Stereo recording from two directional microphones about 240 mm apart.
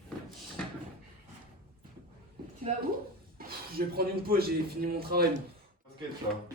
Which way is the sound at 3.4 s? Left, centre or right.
Right.